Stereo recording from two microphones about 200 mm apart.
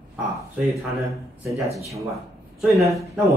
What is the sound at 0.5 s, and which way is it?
Speech, centre (ahead or behind).